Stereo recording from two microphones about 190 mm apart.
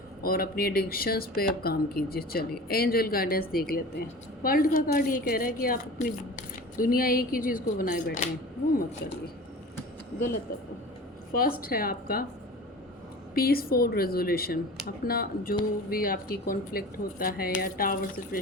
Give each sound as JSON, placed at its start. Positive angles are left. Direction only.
{"t": 0.2, "sound": "a woman's voice", "side_deg": 50}
{"t": 11.3, "sound": "a woman's voice", "side_deg": 50}
{"t": 13.3, "sound": "a woman's voice", "side_deg": 55}